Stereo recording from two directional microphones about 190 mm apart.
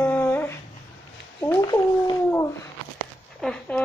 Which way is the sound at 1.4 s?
15° left (ahead or behind).